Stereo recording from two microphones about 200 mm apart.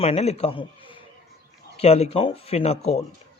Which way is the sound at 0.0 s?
30° left (ahead or behind).